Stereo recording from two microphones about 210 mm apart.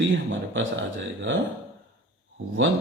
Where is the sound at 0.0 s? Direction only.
65° right (ahead or behind).